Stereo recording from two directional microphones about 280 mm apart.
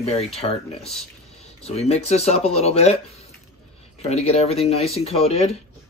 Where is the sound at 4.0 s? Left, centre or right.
Left.